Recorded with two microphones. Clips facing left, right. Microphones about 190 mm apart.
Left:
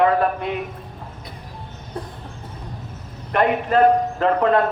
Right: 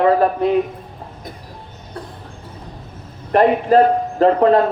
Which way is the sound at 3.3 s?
35° right (ahead or behind).